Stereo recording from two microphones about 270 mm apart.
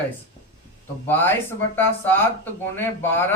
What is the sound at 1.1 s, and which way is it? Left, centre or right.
A man's voice, centre.